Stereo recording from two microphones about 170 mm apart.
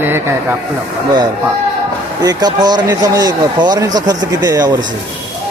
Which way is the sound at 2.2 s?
25° right (ahead or behind).